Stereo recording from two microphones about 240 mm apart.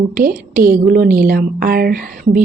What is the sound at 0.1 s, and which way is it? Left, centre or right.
A woman's voice, right.